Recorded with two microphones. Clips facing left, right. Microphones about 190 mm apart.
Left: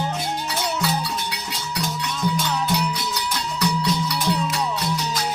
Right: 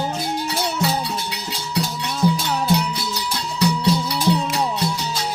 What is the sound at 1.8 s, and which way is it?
Music, 30° right (ahead or behind).